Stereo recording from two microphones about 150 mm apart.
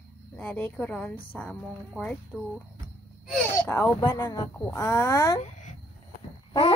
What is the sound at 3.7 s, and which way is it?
Speech, 25° left (ahead or behind).